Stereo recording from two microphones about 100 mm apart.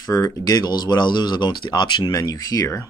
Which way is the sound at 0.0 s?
40° left (ahead or behind).